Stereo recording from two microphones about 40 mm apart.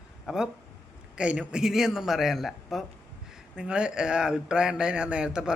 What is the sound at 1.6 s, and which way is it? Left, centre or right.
A man's voice, centre.